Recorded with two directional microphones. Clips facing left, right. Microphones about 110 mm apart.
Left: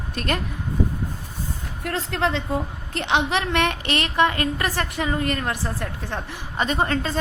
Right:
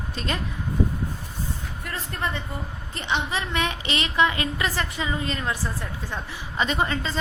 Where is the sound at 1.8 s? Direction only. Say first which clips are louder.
Left 7 dB; 80° left; by 6.3 s 65° left (ahead or behind).